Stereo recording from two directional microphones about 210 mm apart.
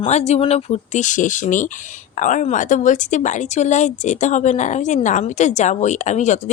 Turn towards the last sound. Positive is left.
turn(degrees=35)  # may be behind; listen again after turning